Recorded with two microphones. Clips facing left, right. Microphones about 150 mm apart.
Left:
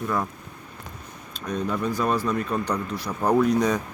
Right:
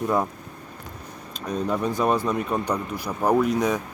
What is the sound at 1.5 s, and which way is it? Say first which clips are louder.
Speech: right 1 dB; 15° right (ahead or behind).